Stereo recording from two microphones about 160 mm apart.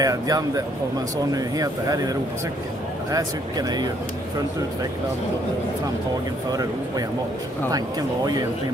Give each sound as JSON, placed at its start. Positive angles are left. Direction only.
{"t": 0.0, "sound": "speech", "side_deg": -20}
{"t": 6.5, "sound": "speech", "side_deg": -25}